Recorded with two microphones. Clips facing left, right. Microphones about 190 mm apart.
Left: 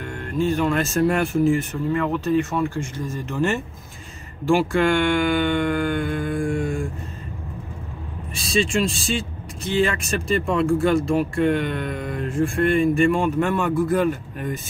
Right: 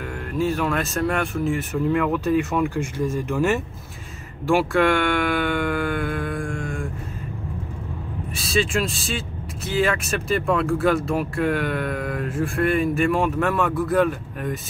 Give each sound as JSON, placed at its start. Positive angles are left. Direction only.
{"t": 0.4, "sound": "speech", "side_deg": -5}
{"t": 8.4, "sound": "speech", "side_deg": -5}